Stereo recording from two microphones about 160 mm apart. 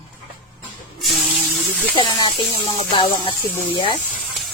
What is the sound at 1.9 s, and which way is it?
Speech, 30° left (ahead or behind).